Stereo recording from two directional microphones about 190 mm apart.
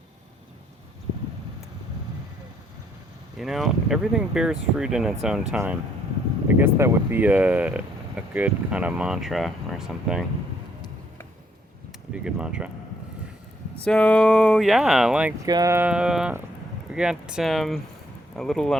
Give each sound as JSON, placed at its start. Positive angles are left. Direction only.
{"t": 3.3, "sound": "speech", "side_deg": 0}
{"t": 12.2, "sound": "speech", "side_deg": -5}
{"t": 13.8, "sound": "speech", "side_deg": 5}
{"t": 15.4, "sound": "speech", "side_deg": -20}